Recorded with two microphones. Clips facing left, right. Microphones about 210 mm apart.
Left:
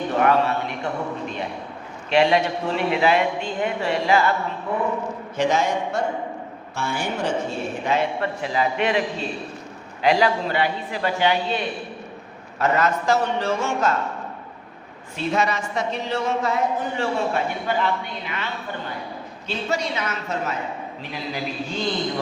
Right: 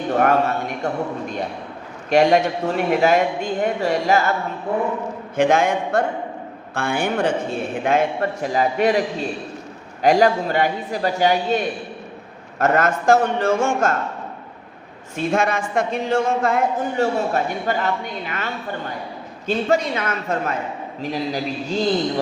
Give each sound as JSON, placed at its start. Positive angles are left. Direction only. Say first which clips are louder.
{"t": 0.2, "sound": "a sound", "louder": "right 1 dB", "side_deg": -45}
{"t": 2.0, "sound": "speech", "louder": "right 3 dB", "side_deg": -45}
{"t": 5.4, "sound": "a man's voice", "louder": "right 4 dB", "side_deg": -55}
{"t": 7.9, "sound": "speech", "louder": "right 4 dB", "side_deg": -45}
{"t": 15.1, "sound": "speech", "louder": "right 3 dB", "side_deg": -50}
{"t": 21.0, "sound": "a man's voice", "louder": "right 7 dB", "side_deg": -40}